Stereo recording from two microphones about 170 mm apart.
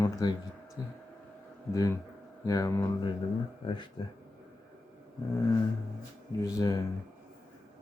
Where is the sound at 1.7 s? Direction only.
20° left (ahead or behind).